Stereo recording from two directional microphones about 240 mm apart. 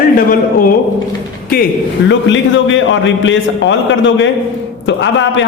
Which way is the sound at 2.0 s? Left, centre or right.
Left.